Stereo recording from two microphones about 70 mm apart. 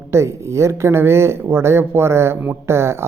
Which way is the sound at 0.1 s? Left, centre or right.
Right.